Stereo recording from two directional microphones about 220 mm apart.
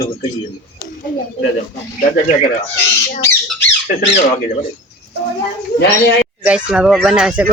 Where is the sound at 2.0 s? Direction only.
35° left (ahead or behind).